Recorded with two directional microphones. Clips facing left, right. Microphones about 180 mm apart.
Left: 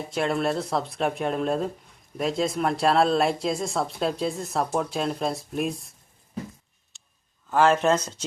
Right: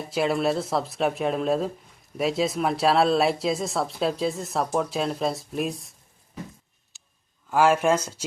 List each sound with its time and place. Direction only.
0.1 s speech: 5° right (ahead or behind)
6.9 s a sound: centre (ahead or behind)
7.5 s speech: 10° right (ahead or behind)